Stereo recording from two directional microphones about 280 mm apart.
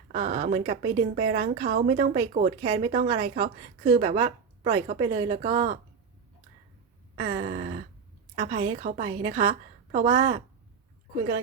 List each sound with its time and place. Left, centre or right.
0.1 s a woman's voice: right
7.3 s a woman's voice: right